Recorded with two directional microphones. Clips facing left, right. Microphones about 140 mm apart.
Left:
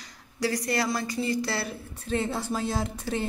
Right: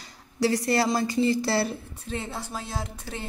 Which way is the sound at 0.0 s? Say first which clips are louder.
Right 4 dB; 30° right (ahead or behind).